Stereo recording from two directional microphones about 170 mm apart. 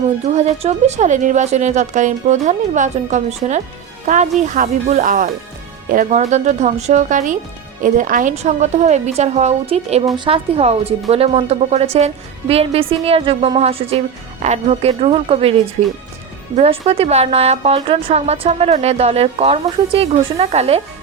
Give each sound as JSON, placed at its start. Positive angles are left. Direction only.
{"t": 0.3, "sound": "a woman's voice", "side_deg": -40}